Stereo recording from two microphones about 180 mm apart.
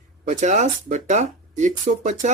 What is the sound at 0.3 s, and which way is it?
Speech, 45° right (ahead or behind).